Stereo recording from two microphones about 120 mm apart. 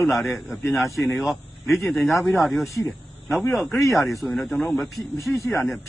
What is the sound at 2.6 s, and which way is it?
Speech, 25° left (ahead or behind).